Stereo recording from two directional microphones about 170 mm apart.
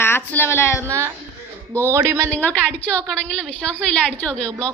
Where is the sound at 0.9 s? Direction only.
15° right (ahead or behind).